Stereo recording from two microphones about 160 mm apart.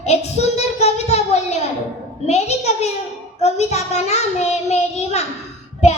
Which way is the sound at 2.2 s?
45° left (ahead or behind).